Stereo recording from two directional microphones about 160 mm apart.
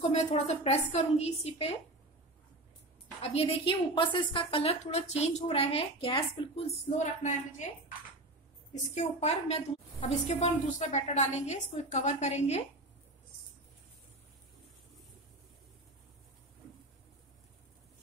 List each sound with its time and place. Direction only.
0.1 s a woman's voice: 45° left (ahead or behind)
3.2 s a woman's voice: 35° left (ahead or behind)
8.9 s a woman's voice: 40° left (ahead or behind)